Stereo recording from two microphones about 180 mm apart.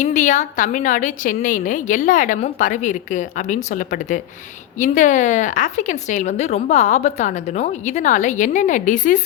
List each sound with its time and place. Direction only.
0.0 s a woman's voice: 45° left (ahead or behind)